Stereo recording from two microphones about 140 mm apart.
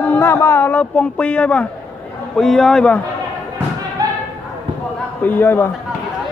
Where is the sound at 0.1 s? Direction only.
15° left (ahead or behind).